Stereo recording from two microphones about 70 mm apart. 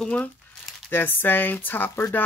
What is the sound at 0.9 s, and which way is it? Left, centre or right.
Speech, left.